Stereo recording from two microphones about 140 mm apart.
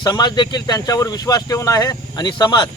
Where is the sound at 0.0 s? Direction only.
30° left (ahead or behind).